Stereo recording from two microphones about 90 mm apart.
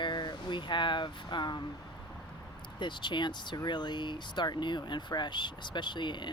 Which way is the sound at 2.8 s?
60° left (ahead or behind).